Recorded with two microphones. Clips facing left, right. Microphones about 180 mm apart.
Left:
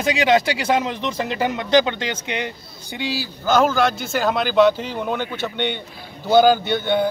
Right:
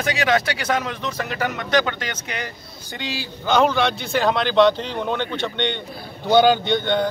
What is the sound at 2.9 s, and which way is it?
A man's voice, 10° left (ahead or behind).